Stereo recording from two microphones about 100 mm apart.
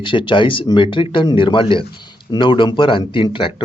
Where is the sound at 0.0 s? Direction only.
55° left (ahead or behind).